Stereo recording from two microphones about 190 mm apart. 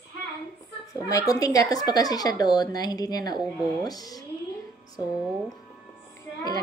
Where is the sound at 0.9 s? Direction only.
15° left (ahead or behind).